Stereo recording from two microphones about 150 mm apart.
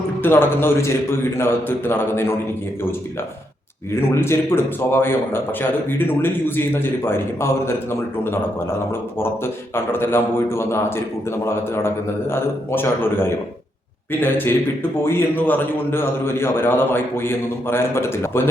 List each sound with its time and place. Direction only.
0.2 s a man's voice: 15° left (ahead or behind)
4.1 s a man's voice: 15° left (ahead or behind)
14.1 s a man's voice: 15° left (ahead or behind)